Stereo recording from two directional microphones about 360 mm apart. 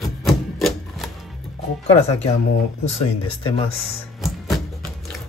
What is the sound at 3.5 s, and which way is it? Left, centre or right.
Speech, centre.